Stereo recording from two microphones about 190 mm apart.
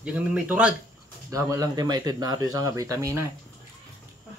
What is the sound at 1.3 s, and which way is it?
Speech, 15° right (ahead or behind).